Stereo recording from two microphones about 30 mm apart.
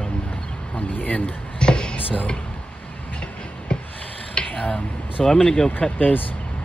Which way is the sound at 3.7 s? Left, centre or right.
Left.